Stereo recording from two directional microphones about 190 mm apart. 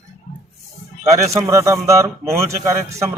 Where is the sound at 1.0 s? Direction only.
35° right (ahead or behind).